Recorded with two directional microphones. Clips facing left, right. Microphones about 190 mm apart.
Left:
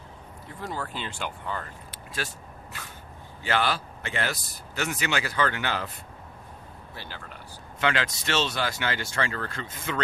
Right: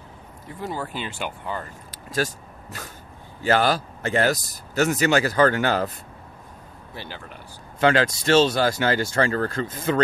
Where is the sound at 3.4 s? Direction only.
40° right (ahead or behind).